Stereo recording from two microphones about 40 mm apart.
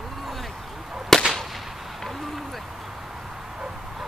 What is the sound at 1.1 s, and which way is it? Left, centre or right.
Whip, centre.